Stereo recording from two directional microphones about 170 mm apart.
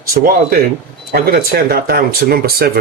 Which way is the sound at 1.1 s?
60° right (ahead or behind).